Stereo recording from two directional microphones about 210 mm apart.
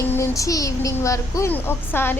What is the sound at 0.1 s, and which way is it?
Speech, 15° left (ahead or behind).